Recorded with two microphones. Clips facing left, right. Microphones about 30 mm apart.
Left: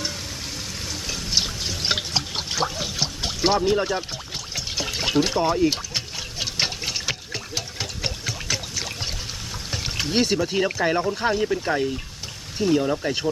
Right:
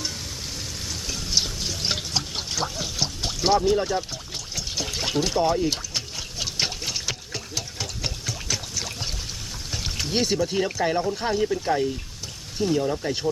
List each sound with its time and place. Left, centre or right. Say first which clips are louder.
1.0 s frying: left 1 dB; centre
2.0 s pour: left 2 dB; centre
4.5 s trickle: left 2 dB; centre
7.0 s a sound: left 2 dB; centre
9.7 s pour: left 3 dB; centre
10.3 s speech: left 2 dB; centre